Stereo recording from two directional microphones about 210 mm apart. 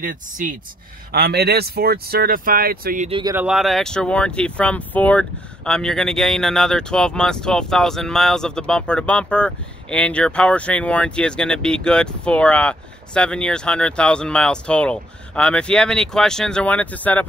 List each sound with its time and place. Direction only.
0.0 s speech: 40° right (ahead or behind)
3.1 s speech: 25° right (ahead or behind)
3.3 s speech: 5° right (ahead or behind)